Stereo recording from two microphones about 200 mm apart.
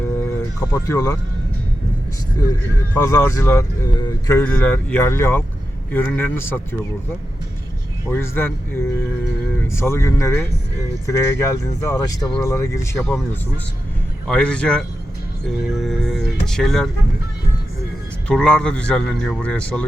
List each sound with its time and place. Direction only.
0.6 s speech: 15° left (ahead or behind)
2.9 s speech: 15° left (ahead or behind)
8.0 s speech: 10° left (ahead or behind)
14.3 s speech: 5° left (ahead or behind)
18.3 s speech: 5° left (ahead or behind)